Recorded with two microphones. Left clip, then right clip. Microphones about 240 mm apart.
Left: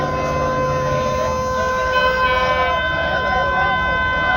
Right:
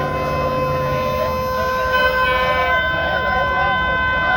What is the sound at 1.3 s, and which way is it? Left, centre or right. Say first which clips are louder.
Siren: even; right.